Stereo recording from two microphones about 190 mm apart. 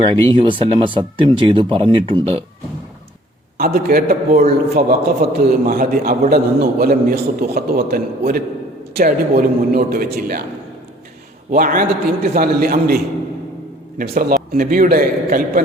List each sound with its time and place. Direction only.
0.0 s speech: 25° right (ahead or behind)
3.8 s a man's voice: 50° right (ahead or behind)
11.5 s a man's voice: 45° right (ahead or behind)
14.0 s a man's voice: 50° right (ahead or behind)